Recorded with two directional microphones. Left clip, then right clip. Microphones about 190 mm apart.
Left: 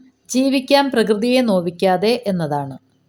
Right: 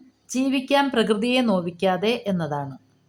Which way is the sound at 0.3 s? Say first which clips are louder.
Left 7 dB; 20° left (ahead or behind).